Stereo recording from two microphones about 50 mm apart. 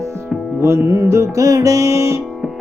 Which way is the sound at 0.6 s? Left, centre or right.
Right.